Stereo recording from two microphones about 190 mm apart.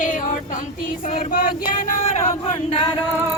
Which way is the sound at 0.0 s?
45° left (ahead or behind).